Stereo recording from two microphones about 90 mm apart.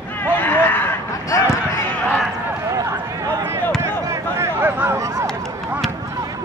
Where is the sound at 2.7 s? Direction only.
35° right (ahead or behind).